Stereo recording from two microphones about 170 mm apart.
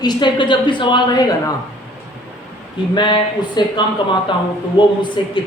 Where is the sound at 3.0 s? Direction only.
25° left (ahead or behind).